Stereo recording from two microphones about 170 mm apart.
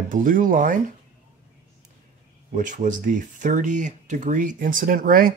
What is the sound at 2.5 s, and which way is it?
Speech, 50° right (ahead or behind).